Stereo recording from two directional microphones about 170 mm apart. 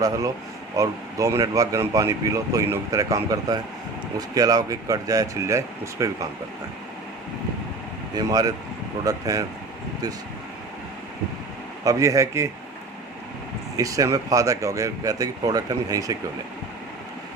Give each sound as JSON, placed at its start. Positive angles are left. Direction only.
{"t": 0.8, "sound": "speech", "side_deg": -20}
{"t": 8.1, "sound": "speech", "side_deg": -20}
{"t": 11.9, "sound": "a man's voice", "side_deg": -20}
{"t": 13.7, "sound": "speech", "side_deg": -20}